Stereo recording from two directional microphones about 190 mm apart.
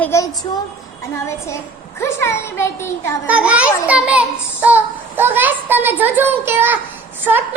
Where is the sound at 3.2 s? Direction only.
5° right (ahead or behind).